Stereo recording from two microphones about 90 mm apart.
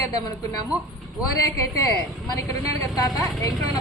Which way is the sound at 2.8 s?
45° left (ahead or behind).